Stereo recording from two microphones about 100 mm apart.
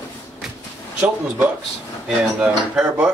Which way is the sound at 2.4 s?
10° right (ahead or behind).